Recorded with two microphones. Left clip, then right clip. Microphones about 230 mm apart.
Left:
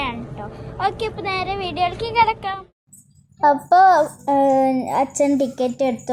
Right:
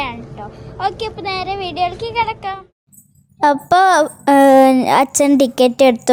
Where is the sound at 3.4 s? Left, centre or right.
Right.